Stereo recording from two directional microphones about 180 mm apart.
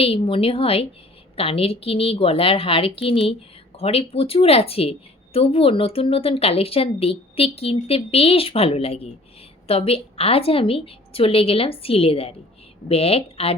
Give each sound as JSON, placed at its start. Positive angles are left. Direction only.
{"t": 0.0, "sound": "a woman's voice", "side_deg": 30}